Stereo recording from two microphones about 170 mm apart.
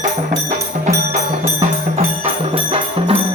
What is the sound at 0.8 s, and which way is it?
Music, 40° right (ahead or behind).